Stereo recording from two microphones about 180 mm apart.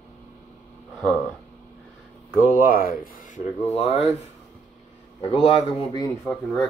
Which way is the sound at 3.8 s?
35° left (ahead or behind).